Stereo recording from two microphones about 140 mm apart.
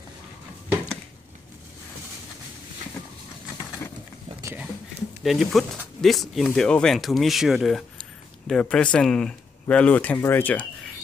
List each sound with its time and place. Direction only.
5.2 s speech: centre (ahead or behind)